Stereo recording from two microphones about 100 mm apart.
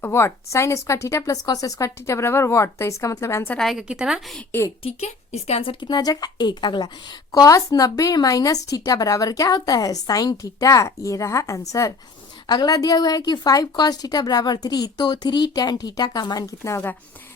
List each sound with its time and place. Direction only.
0.0 s speech: 25° left (ahead or behind)
3.6 s a woman's voice: centre (ahead or behind)
4.8 s a woman's voice: 90° left
5.8 s a woman's voice: 45° left (ahead or behind)
7.3 s a woman's voice: 35° left (ahead or behind)